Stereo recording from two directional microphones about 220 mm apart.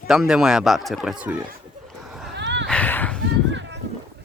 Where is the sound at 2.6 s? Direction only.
5° left (ahead or behind).